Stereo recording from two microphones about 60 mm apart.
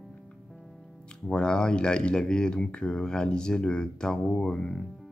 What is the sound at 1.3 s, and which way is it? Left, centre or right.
Speech, centre.